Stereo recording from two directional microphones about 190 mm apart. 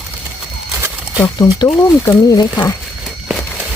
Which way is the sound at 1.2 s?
20° left (ahead or behind).